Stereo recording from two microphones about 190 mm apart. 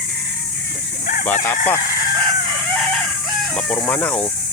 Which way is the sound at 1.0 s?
45° left (ahead or behind).